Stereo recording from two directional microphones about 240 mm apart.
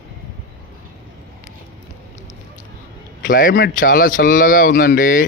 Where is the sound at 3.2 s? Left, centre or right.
Left.